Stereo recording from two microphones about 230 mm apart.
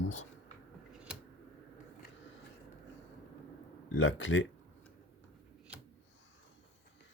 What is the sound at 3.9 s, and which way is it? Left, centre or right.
Speech, left.